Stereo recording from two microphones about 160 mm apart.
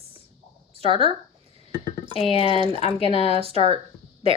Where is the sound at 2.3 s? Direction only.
35° left (ahead or behind).